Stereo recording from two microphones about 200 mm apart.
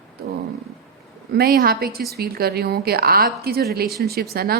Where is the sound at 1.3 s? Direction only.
50° right (ahead or behind).